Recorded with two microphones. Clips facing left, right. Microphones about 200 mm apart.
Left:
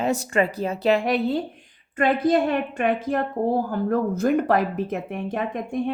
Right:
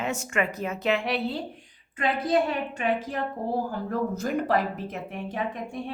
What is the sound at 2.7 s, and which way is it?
A woman's voice, 55° left (ahead or behind).